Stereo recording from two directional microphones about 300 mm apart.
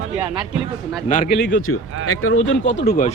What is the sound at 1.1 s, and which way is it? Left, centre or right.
Speech, left.